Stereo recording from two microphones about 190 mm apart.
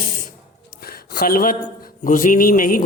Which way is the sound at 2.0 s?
45° left (ahead or behind).